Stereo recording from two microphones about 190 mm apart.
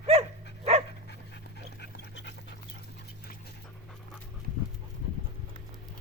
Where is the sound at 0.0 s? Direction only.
35° right (ahead or behind).